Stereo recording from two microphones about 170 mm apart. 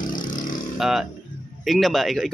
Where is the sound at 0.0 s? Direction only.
50° left (ahead or behind).